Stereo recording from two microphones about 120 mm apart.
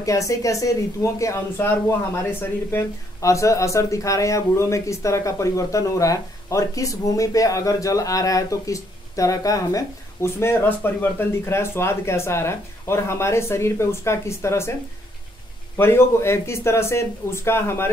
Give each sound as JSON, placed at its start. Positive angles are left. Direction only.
{"t": 0.0, "sound": "speech", "side_deg": 25}
{"t": 15.8, "sound": "speech", "side_deg": 20}